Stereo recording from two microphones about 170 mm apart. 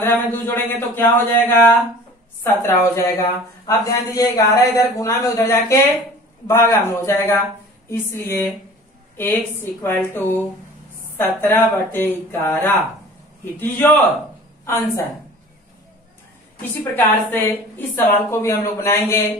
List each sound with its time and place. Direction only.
0.0 s a woman's voice: 15° left (ahead or behind)
16.9 s a woman's voice: 10° left (ahead or behind)